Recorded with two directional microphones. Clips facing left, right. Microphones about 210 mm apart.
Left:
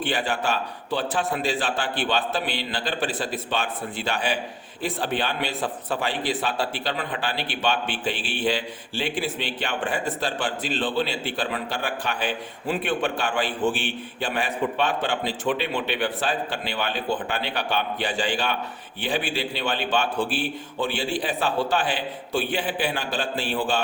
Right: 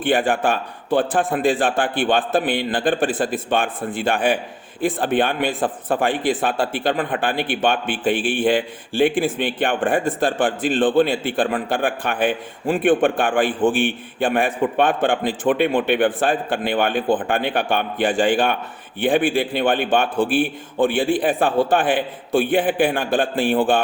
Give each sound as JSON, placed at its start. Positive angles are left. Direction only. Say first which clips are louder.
{"t": 0.0, "sound": "a man's voice", "louder": "right 7 dB", "side_deg": -50}